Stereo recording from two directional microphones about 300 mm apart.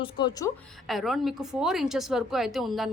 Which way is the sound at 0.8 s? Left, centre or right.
Centre.